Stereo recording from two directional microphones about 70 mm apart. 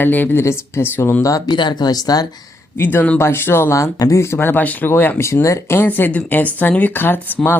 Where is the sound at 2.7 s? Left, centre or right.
Left.